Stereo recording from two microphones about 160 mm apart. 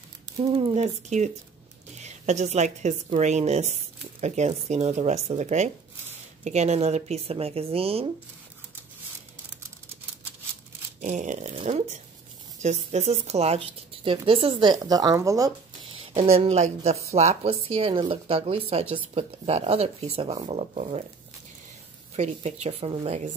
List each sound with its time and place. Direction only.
0.6 s a woman's voice: 45° right (ahead or behind)
11.0 s a woman's voice: 50° right (ahead or behind); by 15.5 s 20° right (ahead or behind)
15.9 s a woman's voice: 35° right (ahead or behind)
22.1 s a woman's voice: 45° right (ahead or behind)